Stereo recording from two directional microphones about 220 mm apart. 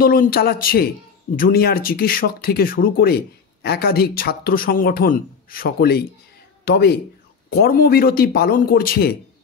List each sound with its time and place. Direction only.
0.0 s speech: 40° left (ahead or behind)